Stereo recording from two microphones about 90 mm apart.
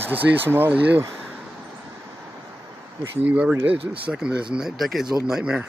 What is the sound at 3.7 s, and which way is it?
Speech, 80° right.